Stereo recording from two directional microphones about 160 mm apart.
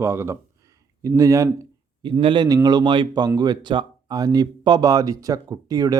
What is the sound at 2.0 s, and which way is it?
Speech, 30° right (ahead or behind).